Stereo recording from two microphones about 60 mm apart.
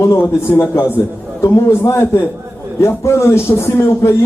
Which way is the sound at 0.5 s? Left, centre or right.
Left.